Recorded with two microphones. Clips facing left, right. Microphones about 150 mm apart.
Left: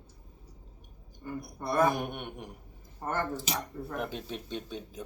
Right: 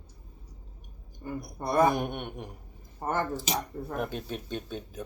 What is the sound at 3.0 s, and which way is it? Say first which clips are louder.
Speech: right 3 dB; 15° right (ahead or behind).